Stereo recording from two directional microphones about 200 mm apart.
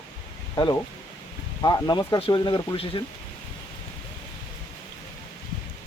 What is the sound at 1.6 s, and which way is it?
Speech, 20° left (ahead or behind).